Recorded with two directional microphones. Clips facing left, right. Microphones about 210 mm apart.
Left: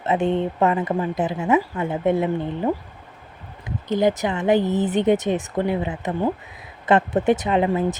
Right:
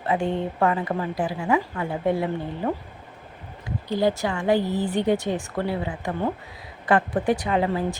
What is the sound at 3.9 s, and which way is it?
Speech, 20° left (ahead or behind).